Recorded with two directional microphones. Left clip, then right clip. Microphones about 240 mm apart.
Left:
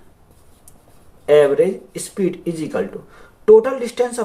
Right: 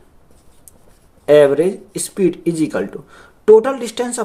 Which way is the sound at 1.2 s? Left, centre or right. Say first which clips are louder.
Right 2 dB; right.